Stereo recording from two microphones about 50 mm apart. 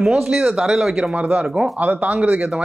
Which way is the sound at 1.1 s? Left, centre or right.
Right.